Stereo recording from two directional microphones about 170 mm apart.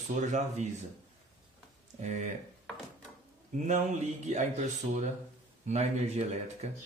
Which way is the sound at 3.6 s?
45° right (ahead or behind).